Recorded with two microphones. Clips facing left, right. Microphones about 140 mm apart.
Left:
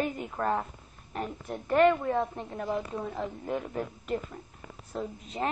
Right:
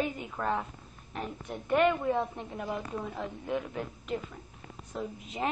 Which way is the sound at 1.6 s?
35° left (ahead or behind).